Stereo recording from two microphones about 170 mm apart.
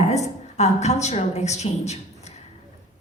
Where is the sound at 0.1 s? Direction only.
40° left (ahead or behind).